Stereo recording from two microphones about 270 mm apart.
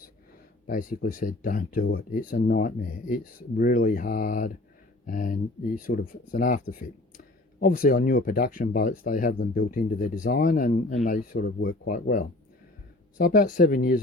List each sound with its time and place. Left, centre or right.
0.7 s speech: left